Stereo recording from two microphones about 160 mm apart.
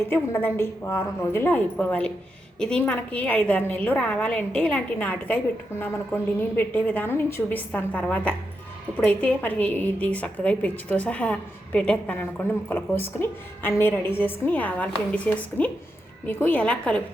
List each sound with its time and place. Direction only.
0.1 s a woman's voice: 15° left (ahead or behind)